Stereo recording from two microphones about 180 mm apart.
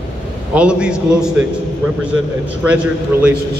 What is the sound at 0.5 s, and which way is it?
Speech, 5° right (ahead or behind).